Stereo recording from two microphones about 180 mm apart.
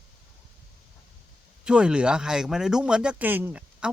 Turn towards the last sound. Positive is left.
turn(degrees=-10)  # may be behind; listen again after turning